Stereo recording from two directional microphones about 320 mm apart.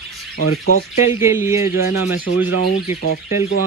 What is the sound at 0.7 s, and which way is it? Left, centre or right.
Speech, left.